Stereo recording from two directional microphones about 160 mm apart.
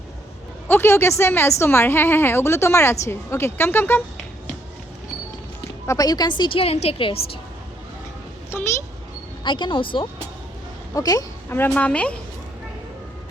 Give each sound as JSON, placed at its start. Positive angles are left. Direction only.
{"t": 0.7, "sound": "a woman's voice", "side_deg": 15}
{"t": 5.8, "sound": "a woman's voice", "side_deg": 20}
{"t": 9.4, "sound": "a woman's voice", "side_deg": 30}